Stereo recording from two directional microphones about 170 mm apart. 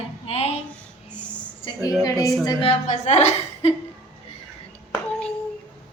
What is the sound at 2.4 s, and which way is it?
A woman's voice, 35° left (ahead or behind).